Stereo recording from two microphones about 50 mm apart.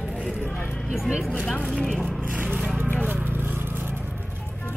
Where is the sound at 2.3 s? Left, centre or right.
Right.